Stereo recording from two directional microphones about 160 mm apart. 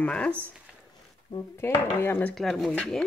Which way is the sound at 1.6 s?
15° left (ahead or behind).